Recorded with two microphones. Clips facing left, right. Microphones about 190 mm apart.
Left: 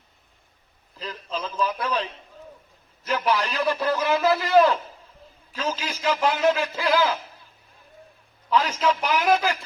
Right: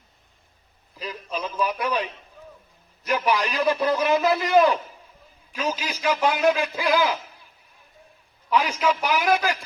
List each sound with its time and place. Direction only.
0.9 s a man's voice: 10° right (ahead or behind)
8.4 s a man's voice: 10° right (ahead or behind)